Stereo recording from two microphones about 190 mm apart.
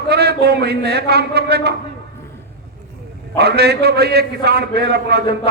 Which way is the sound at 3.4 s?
60° right (ahead or behind).